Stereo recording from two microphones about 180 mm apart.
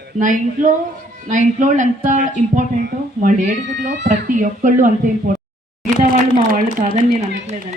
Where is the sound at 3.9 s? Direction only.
80° right.